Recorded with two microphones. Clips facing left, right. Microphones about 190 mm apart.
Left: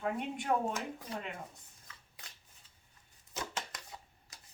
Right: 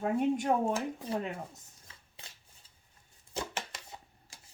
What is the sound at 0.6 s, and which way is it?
Speech, 25° right (ahead or behind).